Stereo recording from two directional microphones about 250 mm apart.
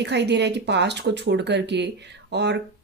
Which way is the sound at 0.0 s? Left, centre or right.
Right.